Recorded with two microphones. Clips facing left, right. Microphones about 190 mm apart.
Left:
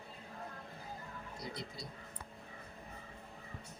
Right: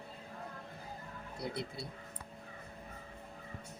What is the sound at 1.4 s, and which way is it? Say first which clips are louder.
Speech: right 6 dB; 60° right (ahead or behind).